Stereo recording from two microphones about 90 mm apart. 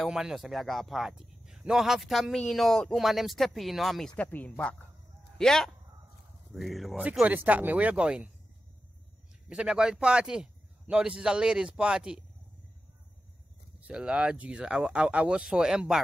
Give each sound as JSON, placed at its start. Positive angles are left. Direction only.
{"t": 0.0, "sound": "a man's voice", "side_deg": -5}
{"t": 4.2, "sound": "a man's voice", "side_deg": 15}
{"t": 7.2, "sound": "speech", "side_deg": -20}
{"t": 9.5, "sound": "speech", "side_deg": -10}
{"t": 13.7, "sound": "speech", "side_deg": -15}